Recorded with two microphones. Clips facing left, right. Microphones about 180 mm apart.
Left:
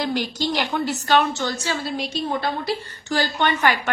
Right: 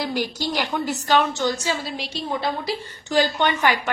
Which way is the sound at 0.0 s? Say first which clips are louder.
Left 1 dB; 10° right (ahead or behind).